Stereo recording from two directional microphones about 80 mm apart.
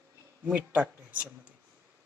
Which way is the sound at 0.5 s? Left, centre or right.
Centre.